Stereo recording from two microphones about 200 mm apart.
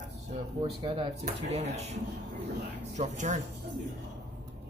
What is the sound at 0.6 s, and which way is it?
Speech, 25° right (ahead or behind).